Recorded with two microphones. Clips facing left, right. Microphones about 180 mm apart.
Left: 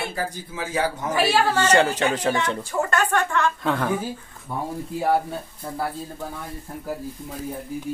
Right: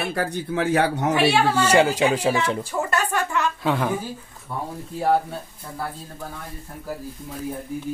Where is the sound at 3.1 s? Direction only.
10° right (ahead or behind).